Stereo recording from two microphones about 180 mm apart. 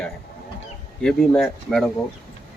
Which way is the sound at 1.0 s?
5° left (ahead or behind).